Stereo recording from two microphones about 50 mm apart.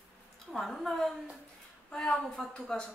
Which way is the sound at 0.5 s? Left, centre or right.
Centre.